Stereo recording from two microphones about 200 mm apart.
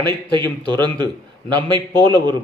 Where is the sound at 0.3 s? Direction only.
20° right (ahead or behind).